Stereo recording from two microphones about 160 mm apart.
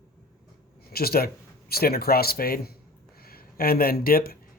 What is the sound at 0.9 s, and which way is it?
Speech, 70° left (ahead or behind).